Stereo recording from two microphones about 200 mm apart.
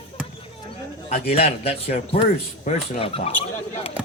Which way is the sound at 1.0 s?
30° left (ahead or behind).